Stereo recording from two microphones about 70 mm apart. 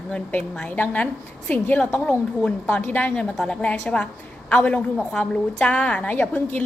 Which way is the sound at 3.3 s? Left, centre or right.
Centre.